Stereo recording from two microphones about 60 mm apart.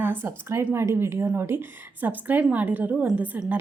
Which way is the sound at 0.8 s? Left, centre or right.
Right.